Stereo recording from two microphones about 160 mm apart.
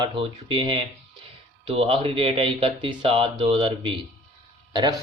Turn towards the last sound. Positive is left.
turn(degrees=-30)  # may be behind; listen again after turning